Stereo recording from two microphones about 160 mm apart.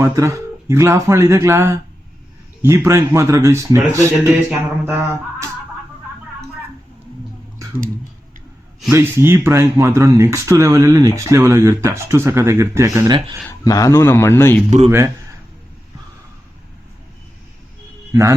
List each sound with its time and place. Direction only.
0.0 s speech: 15° right (ahead or behind)
8.9 s speech: 15° right (ahead or behind)
13.7 s a man's voice: 20° left (ahead or behind)
14.8 s speech: 15° right (ahead or behind)
18.1 s a man's voice: 20° right (ahead or behind)